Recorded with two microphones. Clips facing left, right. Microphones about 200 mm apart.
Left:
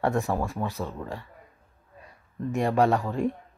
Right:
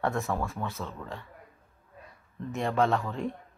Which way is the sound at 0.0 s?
15° left (ahead or behind).